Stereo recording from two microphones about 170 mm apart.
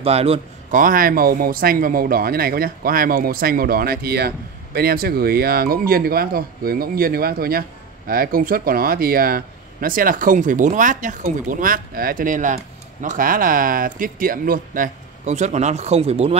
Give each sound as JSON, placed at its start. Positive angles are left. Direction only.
{"t": 0.0, "sound": "a man's voice", "side_deg": -35}
{"t": 0.7, "sound": "speech", "side_deg": -55}